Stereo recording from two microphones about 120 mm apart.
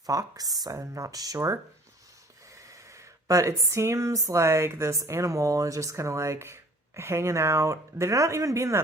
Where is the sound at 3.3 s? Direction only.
25° right (ahead or behind).